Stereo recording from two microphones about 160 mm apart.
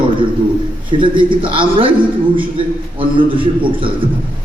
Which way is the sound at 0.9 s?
30° right (ahead or behind).